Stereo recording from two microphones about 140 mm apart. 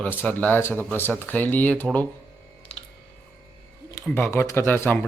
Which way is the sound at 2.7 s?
45° left (ahead or behind).